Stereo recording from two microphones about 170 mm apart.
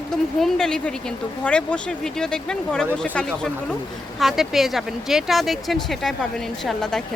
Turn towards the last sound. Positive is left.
turn(degrees=5)  # may be behind; listen again after turning